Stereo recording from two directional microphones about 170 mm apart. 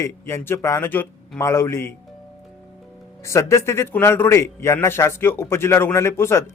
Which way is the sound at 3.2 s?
15° left (ahead or behind).